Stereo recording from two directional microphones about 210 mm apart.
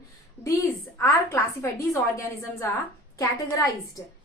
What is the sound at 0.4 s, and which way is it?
A woman's voice, 15° left (ahead or behind).